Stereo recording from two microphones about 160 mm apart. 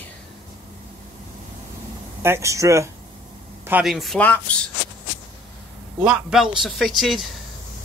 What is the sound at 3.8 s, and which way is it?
Speech, centre (ahead or behind).